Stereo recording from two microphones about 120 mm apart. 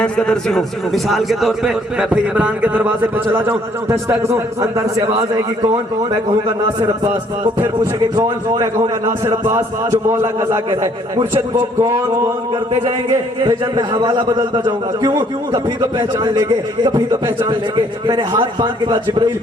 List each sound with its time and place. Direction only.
0.0 s a man's voice: 5° left (ahead or behind); by 4.4 s 20° right (ahead or behind)
6.7 s a man's voice: 35° right (ahead or behind)
11.8 s a man's voice: 25° right (ahead or behind)
12.8 s a man's voice: 35° right (ahead or behind)